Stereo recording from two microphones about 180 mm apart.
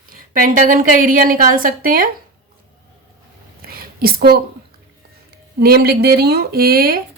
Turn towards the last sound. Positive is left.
turn(degrees=-55)  # may be behind; listen again after turning